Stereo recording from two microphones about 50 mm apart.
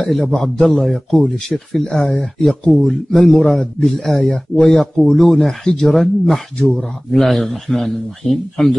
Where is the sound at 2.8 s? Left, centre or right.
Centre.